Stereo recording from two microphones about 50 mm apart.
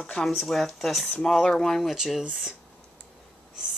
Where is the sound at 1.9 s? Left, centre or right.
Centre.